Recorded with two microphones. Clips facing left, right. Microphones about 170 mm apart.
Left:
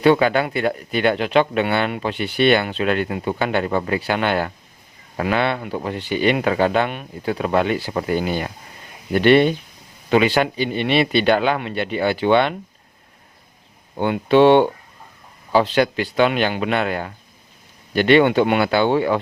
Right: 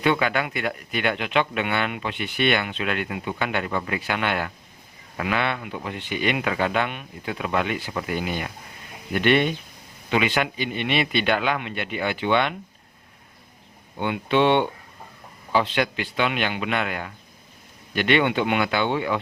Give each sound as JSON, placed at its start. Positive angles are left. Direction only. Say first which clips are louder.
{"t": 0.0, "sound": "speech", "louder": "left 7 dB", "side_deg": 35}
{"t": 13.9, "sound": "speech", "louder": "left 7 dB", "side_deg": 40}